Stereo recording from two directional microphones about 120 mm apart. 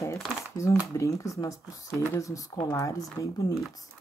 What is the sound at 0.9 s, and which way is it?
Speech, 25° left (ahead or behind).